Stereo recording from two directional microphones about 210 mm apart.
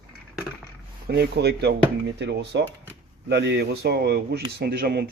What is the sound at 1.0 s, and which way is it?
Speech, 50° right (ahead or behind).